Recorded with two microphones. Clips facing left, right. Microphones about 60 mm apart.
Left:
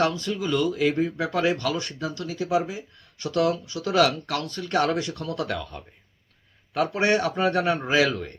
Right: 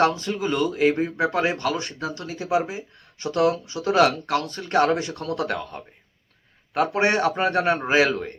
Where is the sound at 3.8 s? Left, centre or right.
Right.